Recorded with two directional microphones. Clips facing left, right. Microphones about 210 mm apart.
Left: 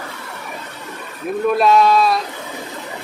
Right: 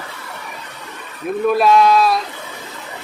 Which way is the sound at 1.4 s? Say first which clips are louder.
Right 1 dB; centre (ahead or behind).